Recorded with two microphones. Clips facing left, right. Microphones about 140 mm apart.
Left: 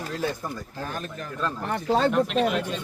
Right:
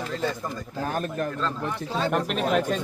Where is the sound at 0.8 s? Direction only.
50° right (ahead or behind).